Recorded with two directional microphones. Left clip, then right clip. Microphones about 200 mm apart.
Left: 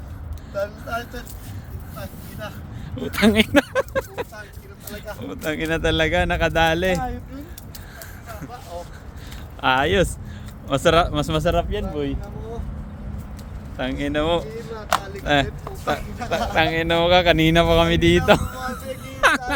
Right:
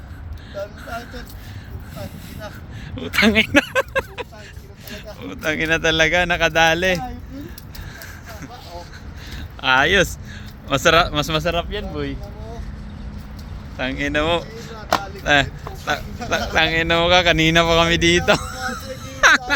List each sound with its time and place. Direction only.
0.9 s speech: centre (ahead or behind)
2.9 s speech: 5° left (ahead or behind)
9.6 s speech: 5° left (ahead or behind)
13.7 s a man's voice: 5° left (ahead or behind)
19.1 s music: 10° left (ahead or behind)